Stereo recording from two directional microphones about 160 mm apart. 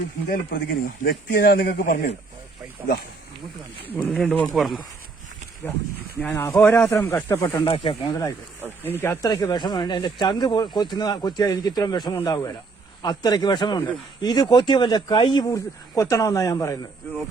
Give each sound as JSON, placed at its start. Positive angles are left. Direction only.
{"t": 0.3, "sound": "a man's voice", "side_deg": 70}
{"t": 3.9, "sound": "speech", "side_deg": 5}
{"t": 6.3, "sound": "speech", "side_deg": 15}
{"t": 7.4, "sound": "speech", "side_deg": 30}
{"t": 8.8, "sound": "speech", "side_deg": 15}
{"t": 9.3, "sound": "speech", "side_deg": 25}
{"t": 15.5, "sound": "speech", "side_deg": 20}